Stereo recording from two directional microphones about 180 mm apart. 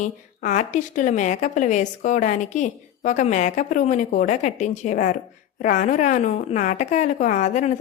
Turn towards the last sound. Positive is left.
turn(degrees=40)  # may be behind; listen again after turning